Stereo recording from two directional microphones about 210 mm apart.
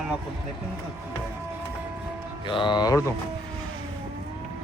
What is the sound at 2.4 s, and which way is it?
Music, 25° left (ahead or behind).